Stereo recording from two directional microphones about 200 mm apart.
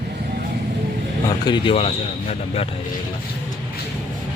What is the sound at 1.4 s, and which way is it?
Speech, 25° left (ahead or behind).